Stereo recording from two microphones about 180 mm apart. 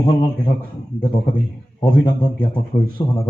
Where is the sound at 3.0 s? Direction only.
20° left (ahead or behind).